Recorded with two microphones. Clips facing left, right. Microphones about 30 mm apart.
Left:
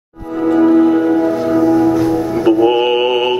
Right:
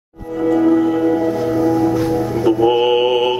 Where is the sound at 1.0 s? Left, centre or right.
Centre.